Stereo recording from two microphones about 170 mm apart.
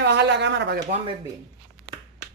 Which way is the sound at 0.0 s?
85° right.